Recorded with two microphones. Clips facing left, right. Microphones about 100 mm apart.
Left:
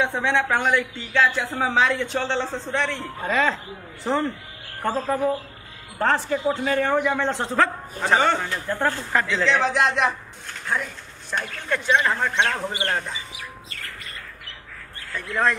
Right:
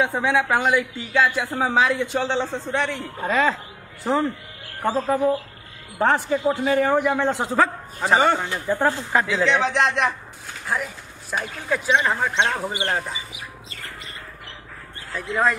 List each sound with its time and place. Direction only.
0.0 s a woman's voice: 5° right (ahead or behind)
13.3 s chirp: 20° right (ahead or behind)